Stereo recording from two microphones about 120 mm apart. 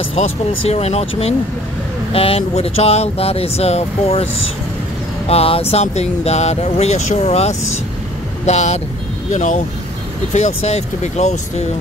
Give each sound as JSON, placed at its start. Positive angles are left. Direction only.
{"t": 0.1, "sound": "speech", "side_deg": 55}
{"t": 5.3, "sound": "speech", "side_deg": 55}
{"t": 9.3, "sound": "speech", "side_deg": 90}
{"t": 10.3, "sound": "speech", "side_deg": 70}